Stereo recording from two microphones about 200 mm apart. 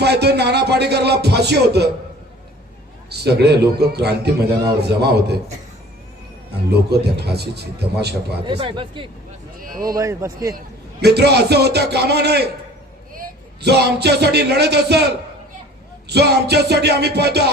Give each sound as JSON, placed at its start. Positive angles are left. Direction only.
{"t": 0.0, "sound": "a man's voice", "side_deg": -55}
{"t": 3.1, "sound": "a man's voice", "side_deg": -55}
{"t": 6.5, "sound": "a man's voice", "side_deg": -55}
{"t": 8.4, "sound": "speech", "side_deg": -25}
{"t": 9.6, "sound": "a sound", "side_deg": -45}
{"t": 9.8, "sound": "a man's voice", "side_deg": -15}
{"t": 11.0, "sound": "a man's voice", "side_deg": -55}